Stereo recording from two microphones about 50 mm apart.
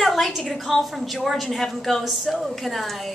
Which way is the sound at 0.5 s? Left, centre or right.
Centre.